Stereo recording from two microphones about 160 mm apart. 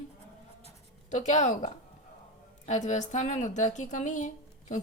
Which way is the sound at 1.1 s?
50° left (ahead or behind).